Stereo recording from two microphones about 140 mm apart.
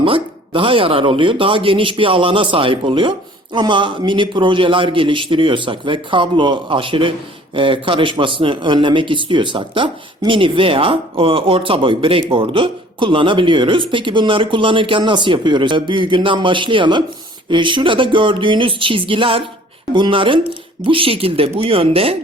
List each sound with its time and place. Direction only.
0.0 s speech: 40° right (ahead or behind)